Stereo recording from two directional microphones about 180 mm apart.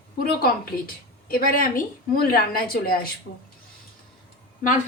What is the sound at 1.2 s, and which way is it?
Speech, 55° left (ahead or behind).